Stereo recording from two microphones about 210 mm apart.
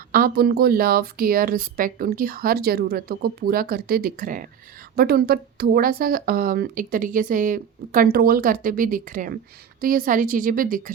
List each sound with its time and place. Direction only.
0.1 s a woman's voice: 45° right (ahead or behind)